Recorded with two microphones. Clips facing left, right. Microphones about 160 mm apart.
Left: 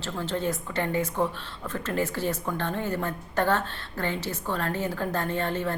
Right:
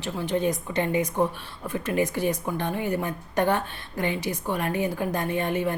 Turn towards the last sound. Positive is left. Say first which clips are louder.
# right 2 dB
turn(degrees=-15)  # may be behind; listen again after turning